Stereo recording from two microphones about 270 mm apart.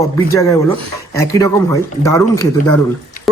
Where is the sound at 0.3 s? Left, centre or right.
Centre.